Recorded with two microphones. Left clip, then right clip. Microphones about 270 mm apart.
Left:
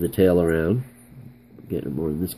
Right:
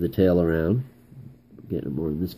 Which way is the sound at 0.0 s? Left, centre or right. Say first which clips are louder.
Left 2 dB; centre.